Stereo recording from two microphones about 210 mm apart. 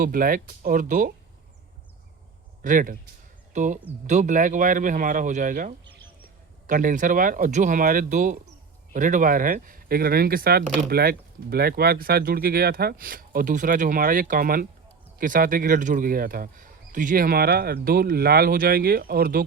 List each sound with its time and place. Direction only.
0.0 s speech: 40° right (ahead or behind)
2.6 s a man's voice: 40° right (ahead or behind)